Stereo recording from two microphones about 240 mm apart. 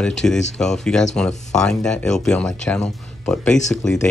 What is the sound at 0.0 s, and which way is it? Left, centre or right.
Speech, centre.